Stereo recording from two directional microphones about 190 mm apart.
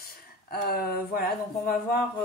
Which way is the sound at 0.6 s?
50° left (ahead or behind).